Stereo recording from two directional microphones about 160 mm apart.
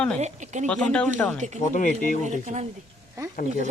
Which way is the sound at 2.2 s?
45° right (ahead or behind).